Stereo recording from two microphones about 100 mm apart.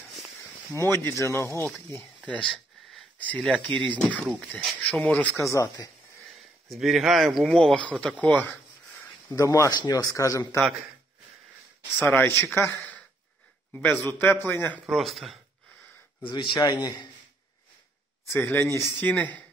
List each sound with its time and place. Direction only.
0.4 s speech: 30° left (ahead or behind)
2.2 s sniff: 10° left (ahead or behind)
3.2 s speech: 10° left (ahead or behind)
5.4 s speech: 30° left (ahead or behind)
6.2 s speech: centre (ahead or behind)
9.3 s speech: 35° left (ahead or behind)
12.0 s a man's voice: 20° left (ahead or behind)
14.9 s speech: centre (ahead or behind)
16.3 s a man's voice: 55° left (ahead or behind)
18.5 s a man's voice: 25° left (ahead or behind)